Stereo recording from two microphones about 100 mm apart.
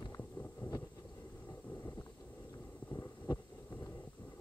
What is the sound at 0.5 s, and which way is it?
Vehicle, 35° left (ahead or behind).